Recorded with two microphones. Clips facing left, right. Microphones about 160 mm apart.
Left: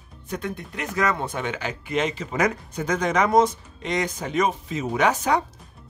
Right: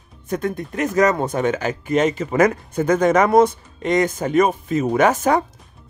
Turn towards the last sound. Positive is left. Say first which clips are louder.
# right 5 dB
turn(degrees=-50)  # may be behind; listen again after turning